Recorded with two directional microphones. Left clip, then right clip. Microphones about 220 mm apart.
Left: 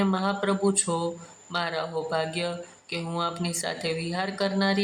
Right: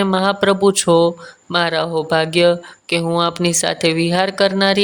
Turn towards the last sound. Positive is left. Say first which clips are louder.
# right 11 dB
turn(degrees=-35)  # may be behind; listen again after turning